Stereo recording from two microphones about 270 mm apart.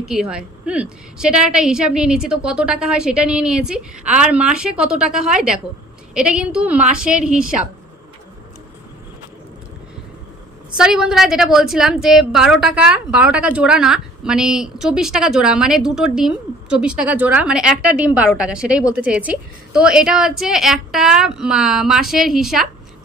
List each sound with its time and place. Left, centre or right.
0.0 s a woman's voice: centre
10.8 s a woman's voice: centre